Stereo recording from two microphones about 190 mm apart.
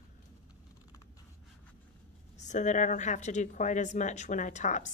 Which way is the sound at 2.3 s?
40° left (ahead or behind).